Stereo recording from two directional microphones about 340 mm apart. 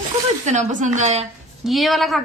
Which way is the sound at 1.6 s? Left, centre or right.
Centre.